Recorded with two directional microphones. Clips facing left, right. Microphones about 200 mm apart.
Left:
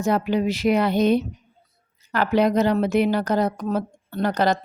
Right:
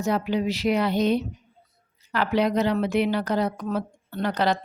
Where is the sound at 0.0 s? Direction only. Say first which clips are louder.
Left 3 dB; 50° left (ahead or behind).